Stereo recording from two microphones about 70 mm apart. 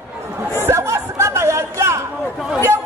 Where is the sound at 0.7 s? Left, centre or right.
Right.